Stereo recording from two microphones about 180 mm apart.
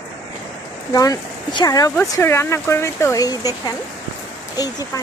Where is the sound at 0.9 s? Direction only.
20° left (ahead or behind).